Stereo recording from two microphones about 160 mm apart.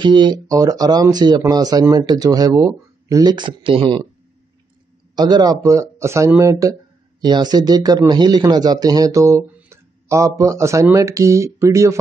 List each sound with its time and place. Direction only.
0.0 s speech: 30° right (ahead or behind)
5.1 s speech: 25° right (ahead or behind)